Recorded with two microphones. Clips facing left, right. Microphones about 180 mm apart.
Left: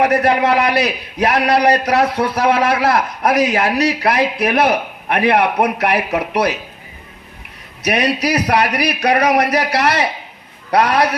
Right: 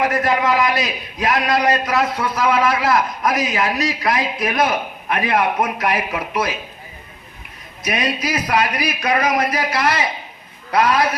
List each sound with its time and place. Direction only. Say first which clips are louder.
0.0 s a man's voice: left 4 dB; 65° left (ahead or behind)
7.8 s a man's voice: left 5 dB; 70° left (ahead or behind)